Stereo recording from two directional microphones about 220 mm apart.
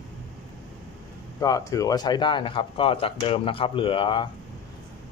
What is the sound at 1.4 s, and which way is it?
Speech, 15° left (ahead or behind).